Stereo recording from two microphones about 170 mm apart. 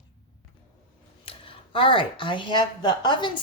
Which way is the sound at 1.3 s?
30° left (ahead or behind).